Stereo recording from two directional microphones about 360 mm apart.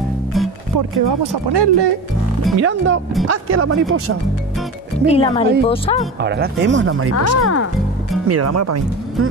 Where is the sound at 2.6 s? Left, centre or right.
Right.